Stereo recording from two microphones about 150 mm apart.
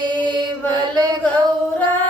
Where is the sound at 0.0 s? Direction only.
30° right (ahead or behind).